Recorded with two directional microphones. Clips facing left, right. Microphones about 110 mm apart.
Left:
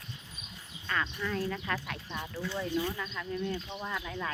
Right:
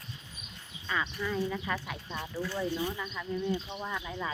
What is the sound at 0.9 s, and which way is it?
Speech, 5° right (ahead or behind).